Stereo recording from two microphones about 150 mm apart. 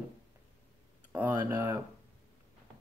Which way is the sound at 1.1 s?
15° right (ahead or behind).